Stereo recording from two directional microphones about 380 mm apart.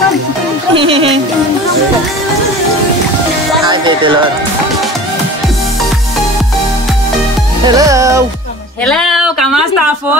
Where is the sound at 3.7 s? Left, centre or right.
Centre.